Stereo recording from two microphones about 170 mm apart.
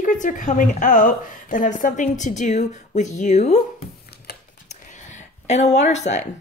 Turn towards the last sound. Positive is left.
turn(degrees=40)  # may be behind; listen again after turning